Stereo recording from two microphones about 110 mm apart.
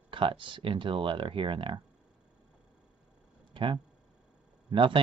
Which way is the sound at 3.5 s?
50° right (ahead or behind).